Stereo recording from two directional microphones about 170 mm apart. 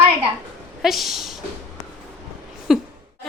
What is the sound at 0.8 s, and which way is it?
Speech, centre (ahead or behind).